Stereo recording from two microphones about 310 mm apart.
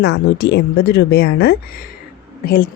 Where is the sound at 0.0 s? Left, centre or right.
Left.